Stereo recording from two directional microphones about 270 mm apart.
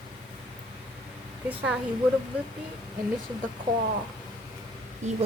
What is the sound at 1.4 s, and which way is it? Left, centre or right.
Speech, centre.